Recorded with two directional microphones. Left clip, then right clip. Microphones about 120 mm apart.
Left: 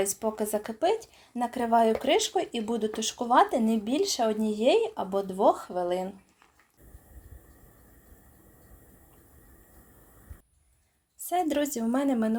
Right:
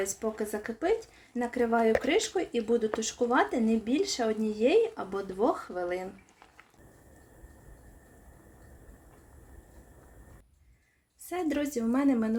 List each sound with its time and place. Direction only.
0.0 s speech: 50° left (ahead or behind)
11.3 s a woman's voice: 55° left (ahead or behind)